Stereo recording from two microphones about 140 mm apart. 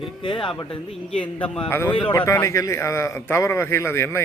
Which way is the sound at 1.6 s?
15° left (ahead or behind).